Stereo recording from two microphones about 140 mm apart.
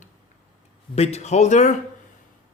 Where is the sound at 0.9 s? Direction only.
50° left (ahead or behind).